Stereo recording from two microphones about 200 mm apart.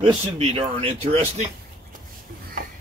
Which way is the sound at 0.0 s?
25° right (ahead or behind).